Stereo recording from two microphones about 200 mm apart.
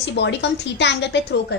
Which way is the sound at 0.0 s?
60° left (ahead or behind).